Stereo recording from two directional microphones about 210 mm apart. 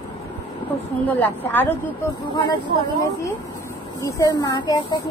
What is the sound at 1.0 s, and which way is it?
A woman's voice, 10° left (ahead or behind).